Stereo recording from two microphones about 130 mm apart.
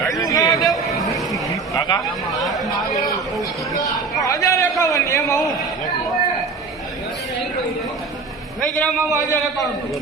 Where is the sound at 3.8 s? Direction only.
25° left (ahead or behind).